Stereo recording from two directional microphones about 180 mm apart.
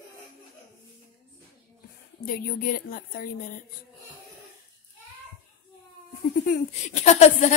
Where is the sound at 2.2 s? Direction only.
50° left (ahead or behind).